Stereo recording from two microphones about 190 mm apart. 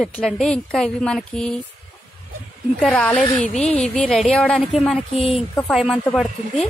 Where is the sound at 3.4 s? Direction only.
35° left (ahead or behind).